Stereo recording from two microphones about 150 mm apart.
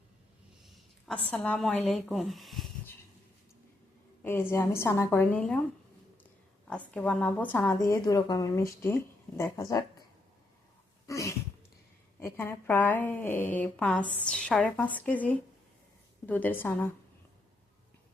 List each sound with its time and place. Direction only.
0.6 s speech: 5° left (ahead or behind)
4.2 s speech: 15° left (ahead or behind)
6.7 s speech: 10° left (ahead or behind)
7.8 s speech: 25° left (ahead or behind)
11.0 s a sound: 20° left (ahead or behind)
12.2 s speech: 15° left (ahead or behind)